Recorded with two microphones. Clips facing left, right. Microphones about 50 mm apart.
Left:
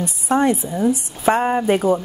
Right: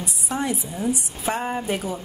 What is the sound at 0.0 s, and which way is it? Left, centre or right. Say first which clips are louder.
A woman's voice: left 9 dB; left.